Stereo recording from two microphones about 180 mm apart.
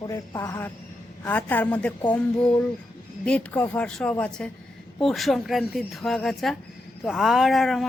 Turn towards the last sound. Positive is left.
turn(degrees=0)  # may be behind; listen again after turning